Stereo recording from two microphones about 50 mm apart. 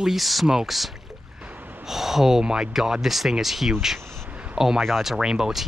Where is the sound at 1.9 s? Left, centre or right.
Centre.